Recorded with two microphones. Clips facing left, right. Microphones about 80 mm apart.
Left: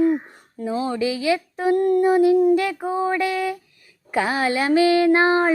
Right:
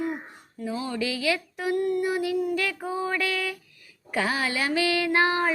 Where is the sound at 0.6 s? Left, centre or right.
Left.